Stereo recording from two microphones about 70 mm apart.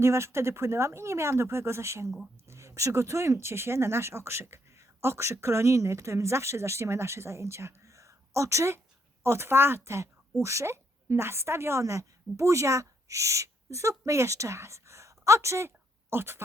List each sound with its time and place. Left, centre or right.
0.0 s speech: right
2.0 s speech: centre
2.5 s a woman's voice: right